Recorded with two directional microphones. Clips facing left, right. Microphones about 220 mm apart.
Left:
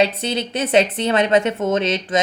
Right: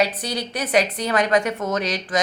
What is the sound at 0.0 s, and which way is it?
Speech, 25° left (ahead or behind).